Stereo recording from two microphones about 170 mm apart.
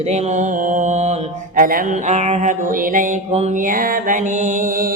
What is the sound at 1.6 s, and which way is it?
Mantra, 55° right (ahead or behind).